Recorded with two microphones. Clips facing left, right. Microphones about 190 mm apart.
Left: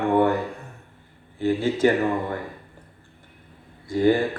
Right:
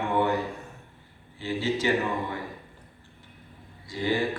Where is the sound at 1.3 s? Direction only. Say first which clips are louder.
Left 6 dB; 55° left (ahead or behind).